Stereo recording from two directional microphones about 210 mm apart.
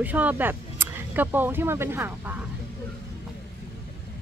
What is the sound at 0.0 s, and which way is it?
Speech, 10° right (ahead or behind).